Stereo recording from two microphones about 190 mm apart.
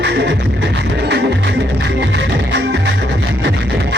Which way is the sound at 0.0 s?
65° right (ahead or behind).